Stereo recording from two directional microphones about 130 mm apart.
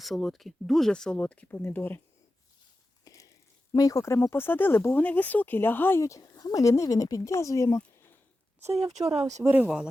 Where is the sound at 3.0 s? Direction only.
25° left (ahead or behind).